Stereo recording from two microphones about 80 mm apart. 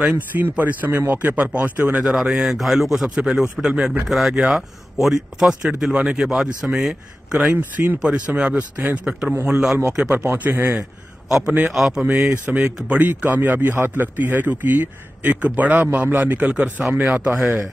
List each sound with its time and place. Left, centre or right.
0.0 s speech: centre
2.0 s speech: centre
7.5 s speech: right
8.0 s speech: centre
9.3 s speech: right
10.7 s a man's voice: centre